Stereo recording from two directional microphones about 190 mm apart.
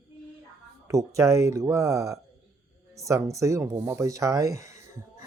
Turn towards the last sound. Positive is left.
turn(degrees=-15)  # may be behind; listen again after turning